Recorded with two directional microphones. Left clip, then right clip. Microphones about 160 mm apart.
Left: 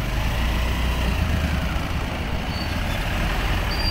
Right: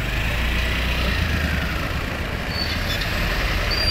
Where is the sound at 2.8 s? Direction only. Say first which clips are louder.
Right 3 dB; 65° left (ahead or behind).